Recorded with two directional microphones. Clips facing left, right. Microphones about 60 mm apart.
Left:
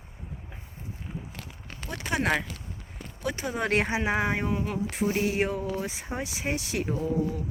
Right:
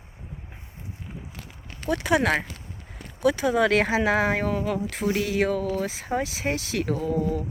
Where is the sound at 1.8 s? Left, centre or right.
Right.